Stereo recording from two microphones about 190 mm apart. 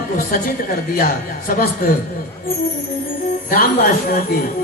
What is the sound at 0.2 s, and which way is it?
A man's voice, 50° left (ahead or behind).